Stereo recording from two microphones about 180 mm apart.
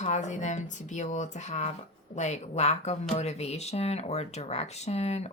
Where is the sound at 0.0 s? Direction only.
40° left (ahead or behind).